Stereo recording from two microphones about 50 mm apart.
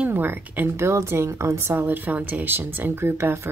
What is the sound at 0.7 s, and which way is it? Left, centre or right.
A woman's voice, right.